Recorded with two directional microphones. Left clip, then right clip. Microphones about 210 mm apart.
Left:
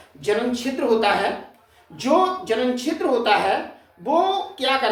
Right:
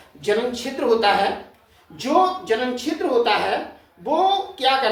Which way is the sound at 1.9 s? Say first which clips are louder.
Even; 20° left (ahead or behind).